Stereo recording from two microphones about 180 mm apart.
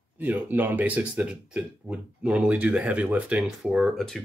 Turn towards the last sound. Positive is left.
turn(degrees=0)  # may be behind; listen again after turning